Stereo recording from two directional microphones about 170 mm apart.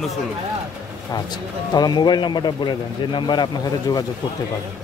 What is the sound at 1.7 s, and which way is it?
A man's voice, 25° left (ahead or behind).